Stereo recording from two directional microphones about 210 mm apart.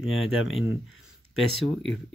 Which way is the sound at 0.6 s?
65° left (ahead or behind).